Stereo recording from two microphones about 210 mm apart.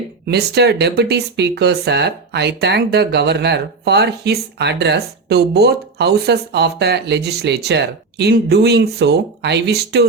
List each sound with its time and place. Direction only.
0.3 s speech: 50° right (ahead or behind)